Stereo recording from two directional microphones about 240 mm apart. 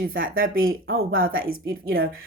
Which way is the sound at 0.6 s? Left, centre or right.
Right.